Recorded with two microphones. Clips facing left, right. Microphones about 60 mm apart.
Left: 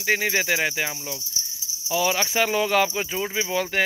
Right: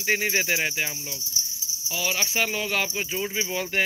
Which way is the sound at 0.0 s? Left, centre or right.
Left.